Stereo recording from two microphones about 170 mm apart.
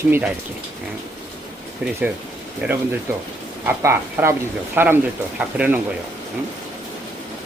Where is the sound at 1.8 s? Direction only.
5° right (ahead or behind).